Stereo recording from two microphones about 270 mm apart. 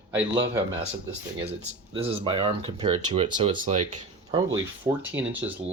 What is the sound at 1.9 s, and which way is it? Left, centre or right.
Speech, centre.